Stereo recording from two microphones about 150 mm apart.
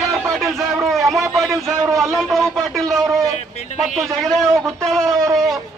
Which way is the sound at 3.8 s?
Centre (ahead or behind).